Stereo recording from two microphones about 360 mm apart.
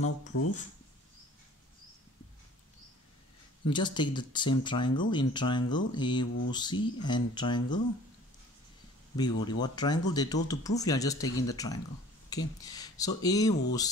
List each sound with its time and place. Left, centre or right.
0.0 s speech: left
3.6 s speech: centre
9.1 s speech: centre